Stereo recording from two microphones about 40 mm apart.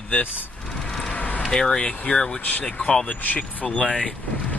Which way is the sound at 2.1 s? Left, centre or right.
Centre.